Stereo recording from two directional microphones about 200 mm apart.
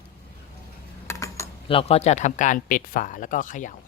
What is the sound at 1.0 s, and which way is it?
Mechanisms, 15° left (ahead or behind).